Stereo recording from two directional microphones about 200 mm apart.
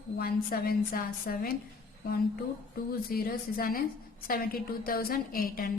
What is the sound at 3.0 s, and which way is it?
A woman's voice, 50° left (ahead or behind).